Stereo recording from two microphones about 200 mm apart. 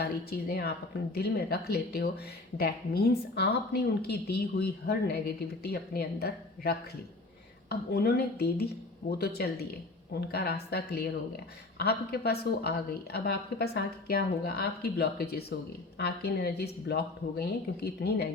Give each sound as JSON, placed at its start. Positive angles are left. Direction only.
{"t": 0.0, "sound": "speech", "side_deg": 50}